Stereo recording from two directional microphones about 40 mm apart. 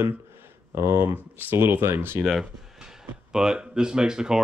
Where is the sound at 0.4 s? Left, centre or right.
Right.